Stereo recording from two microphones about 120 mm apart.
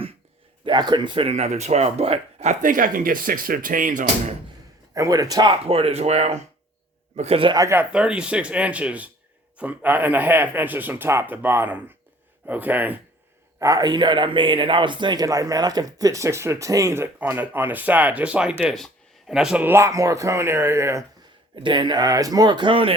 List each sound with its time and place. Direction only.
0.6 s speech: 40° right (ahead or behind)
1.3 s speech: 65° right (ahead or behind); by 4.4 s 90° right
4.9 s speech: 25° right (ahead or behind)
5.6 s speech: 55° right (ahead or behind)
7.2 s a man's voice: 55° right (ahead or behind)
7.5 s speech: 30° right (ahead or behind)
7.8 s a man's voice: 10° right (ahead or behind)
13.6 s speech: 30° right (ahead or behind); by 19.6 s 5° right (ahead or behind)
19.6 s speech: 20° right (ahead or behind)
21.5 s speech: 40° right (ahead or behind)